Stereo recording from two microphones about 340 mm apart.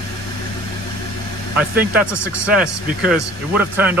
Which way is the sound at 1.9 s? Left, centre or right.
Centre.